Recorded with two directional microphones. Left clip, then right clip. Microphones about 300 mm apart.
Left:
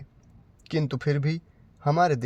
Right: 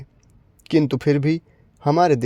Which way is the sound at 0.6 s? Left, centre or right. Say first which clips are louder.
Right 10 dB; right.